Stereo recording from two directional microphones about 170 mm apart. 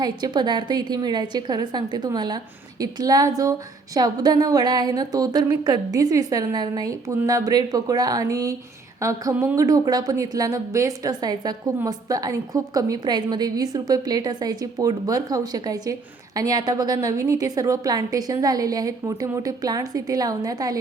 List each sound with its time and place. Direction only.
0.0 s speech: 25° right (ahead or behind)